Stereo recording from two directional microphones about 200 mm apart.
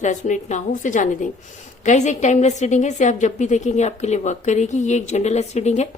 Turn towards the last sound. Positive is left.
turn(degrees=35)  # may be behind; listen again after turning